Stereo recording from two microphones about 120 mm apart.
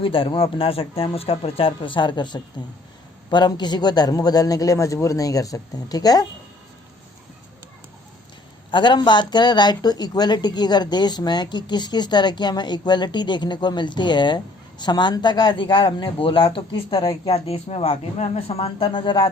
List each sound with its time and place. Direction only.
0.0 s speech: 45° left (ahead or behind); by 6.2 s 30° left (ahead or behind)
8.7 s speech: 40° left (ahead or behind)